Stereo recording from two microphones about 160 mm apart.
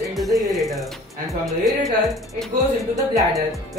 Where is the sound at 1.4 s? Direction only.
Centre (ahead or behind).